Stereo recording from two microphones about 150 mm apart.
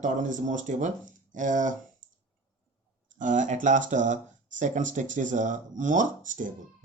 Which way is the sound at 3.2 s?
55° right (ahead or behind).